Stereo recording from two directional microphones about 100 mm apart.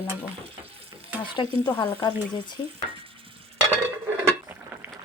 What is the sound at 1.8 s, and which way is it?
Speech, 45° left (ahead or behind).